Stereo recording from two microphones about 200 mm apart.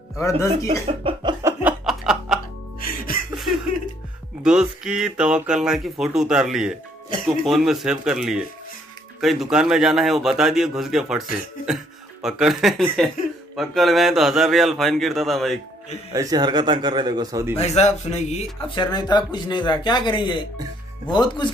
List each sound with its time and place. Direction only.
0.2 s speech: 15° left (ahead or behind)
0.7 s a man's voice: 30° right (ahead or behind)
1.4 s chuckle: 5° right (ahead or behind)
4.4 s a man's voice: 5° right (ahead or behind)
16.1 s a man's voice: 20° right (ahead or behind)
17.6 s a man's voice: 35° left (ahead or behind)
18.8 s speech: 20° left (ahead or behind)